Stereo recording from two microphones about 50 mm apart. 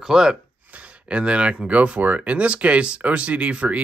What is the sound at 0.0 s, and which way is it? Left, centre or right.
Speech, centre.